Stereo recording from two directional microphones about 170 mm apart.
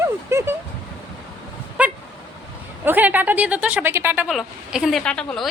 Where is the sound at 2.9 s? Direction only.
10° right (ahead or behind).